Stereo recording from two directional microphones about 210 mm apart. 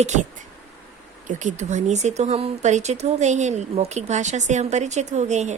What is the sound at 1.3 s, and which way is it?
Speech, 35° right (ahead or behind).